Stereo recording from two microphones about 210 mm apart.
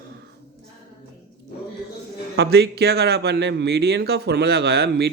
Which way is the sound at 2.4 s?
50° right (ahead or behind).